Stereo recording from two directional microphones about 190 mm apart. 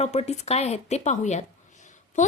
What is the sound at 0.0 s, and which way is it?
Speech, 35° left (ahead or behind).